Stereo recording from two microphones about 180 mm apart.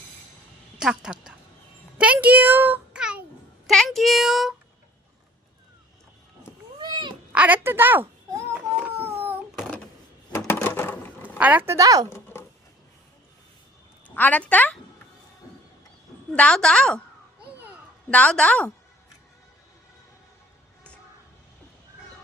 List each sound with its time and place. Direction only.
0.8 s a child's voice: 5° right (ahead or behind)
6.7 s cat: 25° right (ahead or behind)
7.3 s speech: 10° right (ahead or behind)
8.5 s baby cry: 10° right (ahead or behind)
9.6 s a sound: 5° left (ahead or behind)
11.3 s speech: 10° right (ahead or behind)
12.0 s a sound: 15° left (ahead or behind)
14.1 s a woman's voice: 10° left (ahead or behind)
16.3 s speech: 5° left (ahead or behind)
18.1 s a woman's voice: 5° left (ahead or behind)